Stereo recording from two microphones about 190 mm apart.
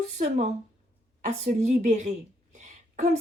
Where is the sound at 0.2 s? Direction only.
40° right (ahead or behind).